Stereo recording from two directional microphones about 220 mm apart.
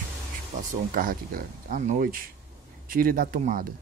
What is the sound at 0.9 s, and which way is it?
Speech, 40° right (ahead or behind).